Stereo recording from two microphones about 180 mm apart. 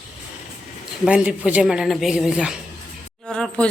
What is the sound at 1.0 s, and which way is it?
A woman's voice, 5° right (ahead or behind).